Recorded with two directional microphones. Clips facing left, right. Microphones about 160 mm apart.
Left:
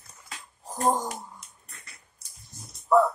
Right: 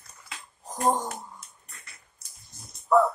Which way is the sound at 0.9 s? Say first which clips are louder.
Even; 10° left (ahead or behind).